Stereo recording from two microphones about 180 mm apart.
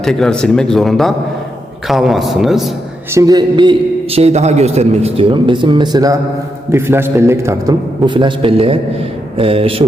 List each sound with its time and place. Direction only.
0.0 s speech: 5° left (ahead or behind)
3.2 s a man's voice: 20° right (ahead or behind)
8.0 s a man's voice: 25° right (ahead or behind)